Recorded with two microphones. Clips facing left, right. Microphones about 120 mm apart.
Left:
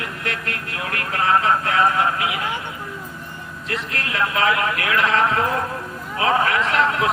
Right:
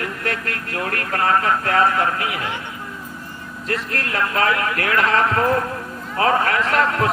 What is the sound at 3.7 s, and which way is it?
A man's voice, 50° right (ahead or behind).